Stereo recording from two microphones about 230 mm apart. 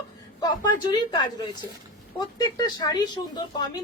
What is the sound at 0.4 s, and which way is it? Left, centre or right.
Speech, centre.